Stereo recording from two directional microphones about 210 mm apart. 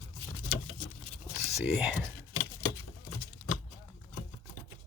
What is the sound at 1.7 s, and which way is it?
Speech, centre (ahead or behind).